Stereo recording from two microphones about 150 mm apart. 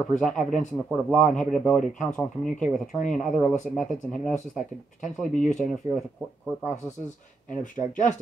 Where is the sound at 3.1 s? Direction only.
Centre (ahead or behind).